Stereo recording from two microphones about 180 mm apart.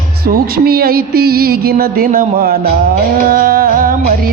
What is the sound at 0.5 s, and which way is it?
Music, 55° right (ahead or behind).